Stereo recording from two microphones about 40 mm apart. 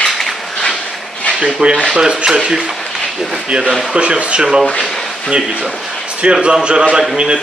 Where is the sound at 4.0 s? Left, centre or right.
Right.